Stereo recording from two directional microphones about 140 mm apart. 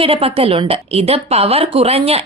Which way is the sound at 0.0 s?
40° right (ahead or behind).